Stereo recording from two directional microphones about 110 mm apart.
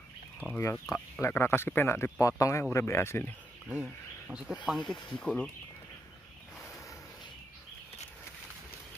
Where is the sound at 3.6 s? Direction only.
15° right (ahead or behind).